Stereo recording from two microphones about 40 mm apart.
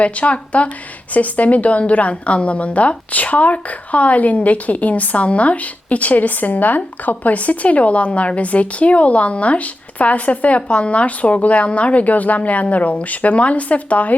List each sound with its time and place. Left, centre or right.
0.0 s a woman's voice: left